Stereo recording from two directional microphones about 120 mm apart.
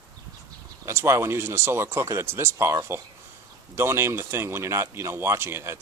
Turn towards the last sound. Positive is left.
turn(degrees=-20)  # may be behind; listen again after turning